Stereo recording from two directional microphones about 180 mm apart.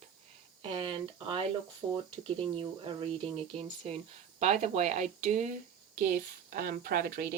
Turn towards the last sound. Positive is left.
turn(degrees=-50)  # may be behind; listen again after turning